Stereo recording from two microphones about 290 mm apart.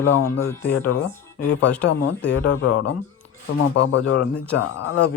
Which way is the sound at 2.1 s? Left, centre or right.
Left.